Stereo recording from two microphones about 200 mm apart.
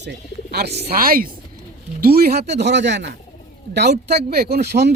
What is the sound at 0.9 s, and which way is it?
Speech, 45° right (ahead or behind).